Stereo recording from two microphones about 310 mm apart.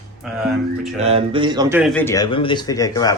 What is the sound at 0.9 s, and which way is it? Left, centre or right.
Speech, centre.